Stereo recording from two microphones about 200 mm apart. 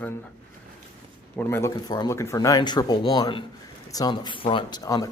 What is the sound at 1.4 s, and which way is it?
Speech, 10° left (ahead or behind).